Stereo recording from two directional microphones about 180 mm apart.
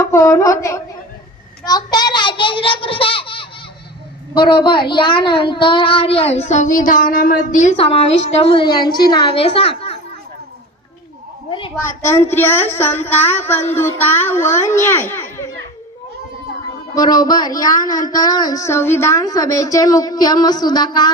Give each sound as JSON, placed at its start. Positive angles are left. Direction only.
{"t": 0.0, "sound": "a woman's voice", "side_deg": 15}
{"t": 12.3, "sound": "speech", "side_deg": 15}
{"t": 16.9, "sound": "a woman's voice", "side_deg": 20}